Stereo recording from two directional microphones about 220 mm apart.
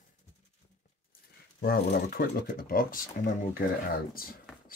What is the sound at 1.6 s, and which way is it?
Speech, 45° left (ahead or behind).